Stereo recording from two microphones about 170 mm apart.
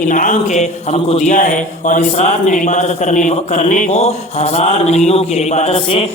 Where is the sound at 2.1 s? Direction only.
40° left (ahead or behind).